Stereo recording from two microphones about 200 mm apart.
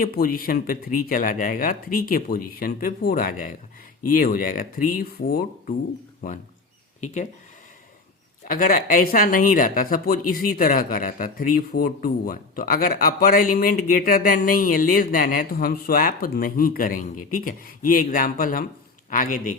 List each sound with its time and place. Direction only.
0.0 s speech: 45° left (ahead or behind)
7.0 s speech: 35° left (ahead or behind)
8.4 s speech: 45° left (ahead or behind)